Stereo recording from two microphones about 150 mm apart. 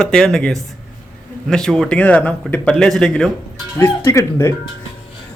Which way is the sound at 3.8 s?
15° left (ahead or behind).